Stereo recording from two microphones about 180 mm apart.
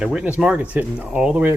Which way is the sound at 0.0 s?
5° right (ahead or behind).